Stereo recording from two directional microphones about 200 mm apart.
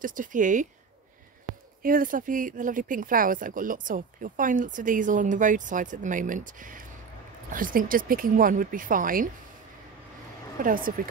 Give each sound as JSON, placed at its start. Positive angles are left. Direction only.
{"t": 0.0, "sound": "speech", "side_deg": -40}
{"t": 1.8, "sound": "speech", "side_deg": -45}
{"t": 10.6, "sound": "speech", "side_deg": -45}